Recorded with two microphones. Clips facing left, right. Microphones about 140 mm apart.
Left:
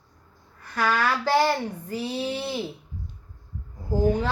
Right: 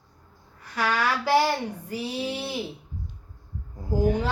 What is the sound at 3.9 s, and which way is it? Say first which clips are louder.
Speech: left 1 dB; 10° right (ahead or behind).